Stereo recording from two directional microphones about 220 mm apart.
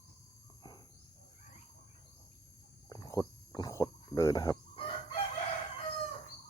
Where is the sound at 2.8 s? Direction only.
15° left (ahead or behind).